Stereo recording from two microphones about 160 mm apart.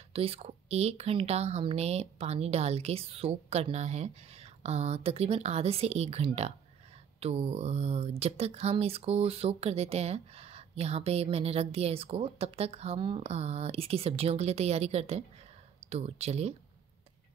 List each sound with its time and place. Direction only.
0.1 s speech: 35° right (ahead or behind)